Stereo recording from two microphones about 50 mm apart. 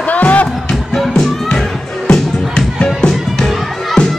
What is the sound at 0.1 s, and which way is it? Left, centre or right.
Music, left.